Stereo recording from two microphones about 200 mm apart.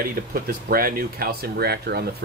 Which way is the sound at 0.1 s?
45° right (ahead or behind).